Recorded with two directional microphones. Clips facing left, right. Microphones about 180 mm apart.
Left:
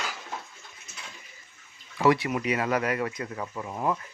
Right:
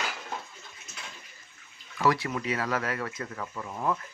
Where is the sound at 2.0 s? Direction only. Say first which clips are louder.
Left 4 dB; 20° left (ahead or behind).